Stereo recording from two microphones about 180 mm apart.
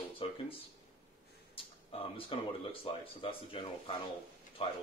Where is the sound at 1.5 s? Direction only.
30° left (ahead or behind).